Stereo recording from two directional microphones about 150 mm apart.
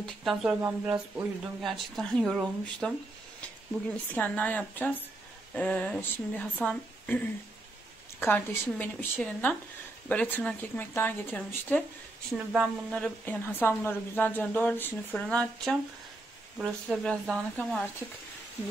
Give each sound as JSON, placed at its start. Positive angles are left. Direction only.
{"t": 0.0, "sound": "speech", "side_deg": 0}
{"t": 0.6, "sound": "speech", "side_deg": -20}
{"t": 1.6, "sound": "speech", "side_deg": 0}
{"t": 4.1, "sound": "a woman's voice", "side_deg": 10}
{"t": 16.5, "sound": "speech", "side_deg": -5}
{"t": 17.0, "sound": "speech", "side_deg": 5}